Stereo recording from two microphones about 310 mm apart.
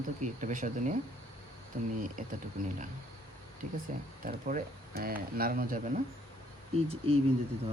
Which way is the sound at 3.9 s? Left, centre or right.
Right.